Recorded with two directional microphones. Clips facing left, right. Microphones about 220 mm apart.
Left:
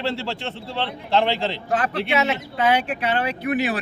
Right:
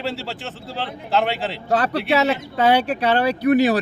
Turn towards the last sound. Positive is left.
turn(degrees=-40)  # may be behind; listen again after turning